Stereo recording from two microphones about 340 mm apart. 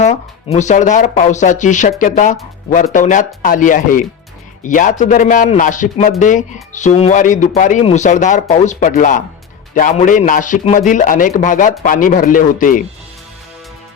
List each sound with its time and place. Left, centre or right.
0.0 s a man's voice: centre